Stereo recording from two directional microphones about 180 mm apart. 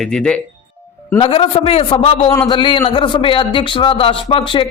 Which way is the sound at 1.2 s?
30° left (ahead or behind).